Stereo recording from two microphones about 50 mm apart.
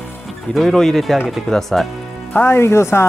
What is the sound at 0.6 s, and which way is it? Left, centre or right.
Speech, centre.